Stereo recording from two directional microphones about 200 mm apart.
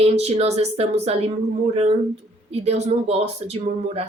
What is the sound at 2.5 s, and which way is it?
Speech, 30° right (ahead or behind).